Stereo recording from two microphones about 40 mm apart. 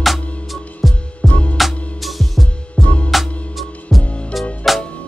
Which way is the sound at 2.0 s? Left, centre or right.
Centre.